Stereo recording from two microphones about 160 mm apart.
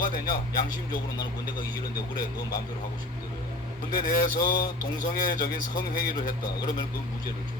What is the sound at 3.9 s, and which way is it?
Speech, 65° left (ahead or behind).